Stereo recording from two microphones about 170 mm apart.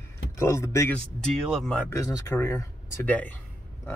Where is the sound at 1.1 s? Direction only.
Centre (ahead or behind).